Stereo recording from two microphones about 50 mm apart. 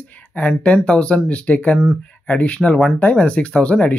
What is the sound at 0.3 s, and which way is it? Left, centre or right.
Speech, left.